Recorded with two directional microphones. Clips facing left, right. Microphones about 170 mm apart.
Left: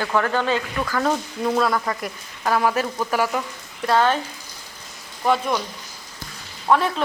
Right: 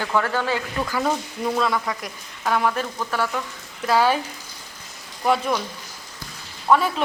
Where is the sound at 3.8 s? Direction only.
5° right (ahead or behind).